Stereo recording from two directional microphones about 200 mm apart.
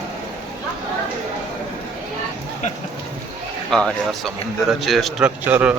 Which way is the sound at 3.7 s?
5° left (ahead or behind).